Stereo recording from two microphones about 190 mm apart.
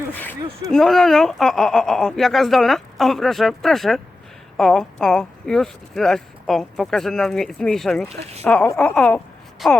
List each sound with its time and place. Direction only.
0.1 s speech: 10° left (ahead or behind)
8.2 s speech: 35° right (ahead or behind)
8.4 s speech: 5° left (ahead or behind)